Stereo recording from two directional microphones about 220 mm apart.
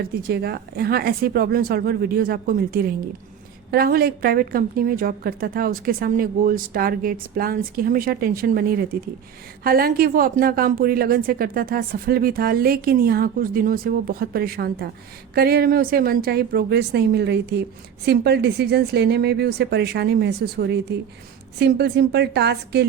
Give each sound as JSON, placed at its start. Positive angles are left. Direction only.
{"t": 0.3, "sound": "a woman's voice", "side_deg": -45}